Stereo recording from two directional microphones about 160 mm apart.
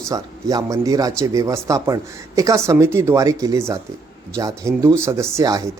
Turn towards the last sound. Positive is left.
turn(degrees=-20)  # may be behind; listen again after turning